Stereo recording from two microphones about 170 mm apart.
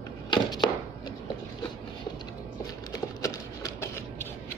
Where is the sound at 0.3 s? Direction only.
25° left (ahead or behind).